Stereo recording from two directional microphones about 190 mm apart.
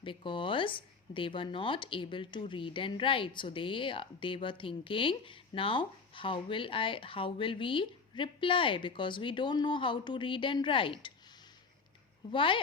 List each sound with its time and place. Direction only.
0.0 s a woman's voice: 25° left (ahead or behind)
12.3 s a woman's voice: 25° left (ahead or behind)